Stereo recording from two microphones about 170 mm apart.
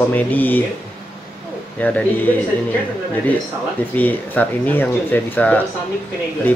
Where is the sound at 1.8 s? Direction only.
10° left (ahead or behind).